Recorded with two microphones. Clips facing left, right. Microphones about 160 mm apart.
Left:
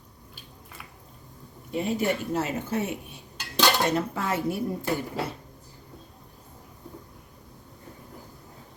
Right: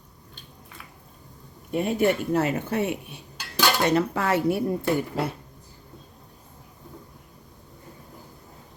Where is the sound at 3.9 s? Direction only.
75° right (ahead or behind).